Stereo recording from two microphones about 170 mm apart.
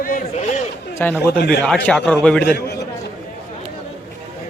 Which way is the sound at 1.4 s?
70° left (ahead or behind).